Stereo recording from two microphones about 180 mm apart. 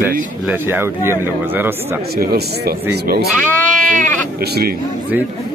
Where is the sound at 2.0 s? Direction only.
60° right (ahead or behind).